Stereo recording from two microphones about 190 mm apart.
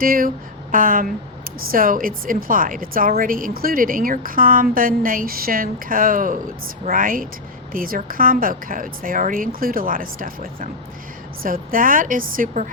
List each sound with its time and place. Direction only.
0.0 s a woman's voice: 50° right (ahead or behind)